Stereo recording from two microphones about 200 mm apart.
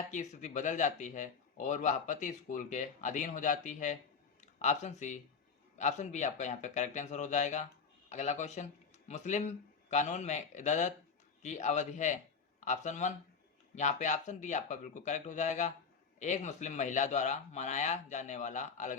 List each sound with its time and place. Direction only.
0.1 s a man's voice: 35° left (ahead or behind)